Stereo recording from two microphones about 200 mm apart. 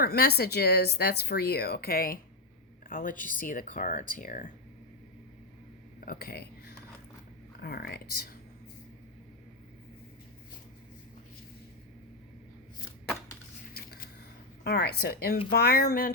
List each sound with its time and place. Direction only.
0.0 s speech: 50° left (ahead or behind)
6.1 s speech: 50° left (ahead or behind)
14.6 s speech: 55° left (ahead or behind)